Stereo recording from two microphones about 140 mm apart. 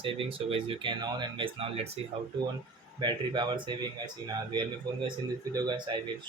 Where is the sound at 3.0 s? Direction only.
35° right (ahead or behind).